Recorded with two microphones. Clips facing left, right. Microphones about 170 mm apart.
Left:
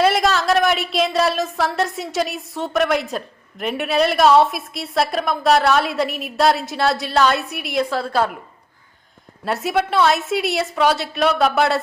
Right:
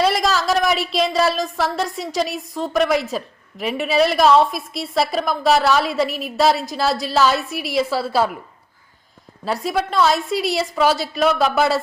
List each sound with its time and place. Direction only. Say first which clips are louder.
0.0 s speech: left 1 dB; centre (ahead or behind)
9.4 s speech: left 1 dB; centre (ahead or behind)